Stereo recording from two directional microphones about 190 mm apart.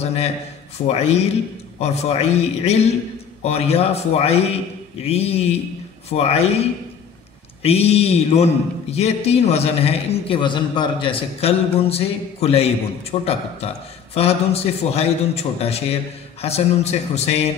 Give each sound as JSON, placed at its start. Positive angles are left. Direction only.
{"t": 0.8, "sound": "a man's voice", "side_deg": 35}